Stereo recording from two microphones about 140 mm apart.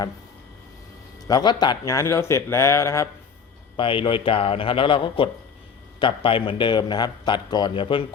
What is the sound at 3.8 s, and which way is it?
A man's voice, 35° left (ahead or behind).